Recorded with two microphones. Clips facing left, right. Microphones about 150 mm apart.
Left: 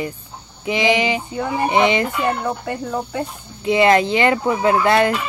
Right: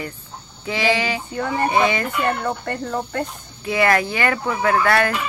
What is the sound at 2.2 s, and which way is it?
Speech, 10° left (ahead or behind).